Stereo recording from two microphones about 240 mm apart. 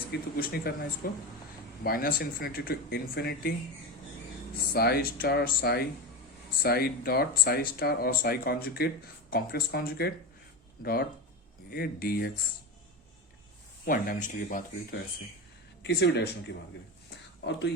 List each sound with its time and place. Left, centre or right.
0.1 s speech: left
4.7 s speech: left
11.7 s speech: left
13.8 s speech: left
15.8 s speech: left
17.4 s speech: left